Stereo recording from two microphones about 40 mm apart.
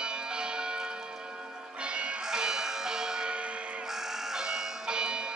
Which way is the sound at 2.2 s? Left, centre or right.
Centre.